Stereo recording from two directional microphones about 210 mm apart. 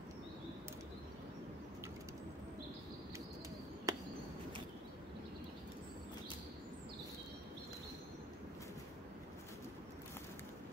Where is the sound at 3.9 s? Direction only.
15° right (ahead or behind).